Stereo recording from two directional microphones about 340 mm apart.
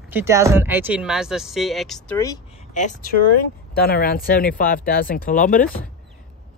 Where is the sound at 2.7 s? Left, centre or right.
Left.